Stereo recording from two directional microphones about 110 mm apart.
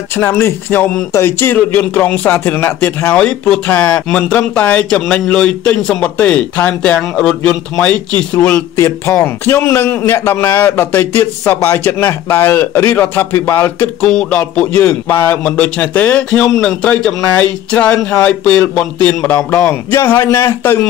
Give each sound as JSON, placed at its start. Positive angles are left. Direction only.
{"t": 0.2, "sound": "a man's voice", "side_deg": 20}